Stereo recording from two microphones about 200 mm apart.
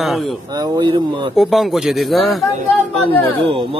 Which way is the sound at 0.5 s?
20° right (ahead or behind).